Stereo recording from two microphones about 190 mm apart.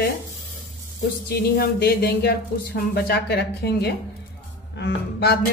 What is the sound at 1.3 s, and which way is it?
Speech, 55° left (ahead or behind).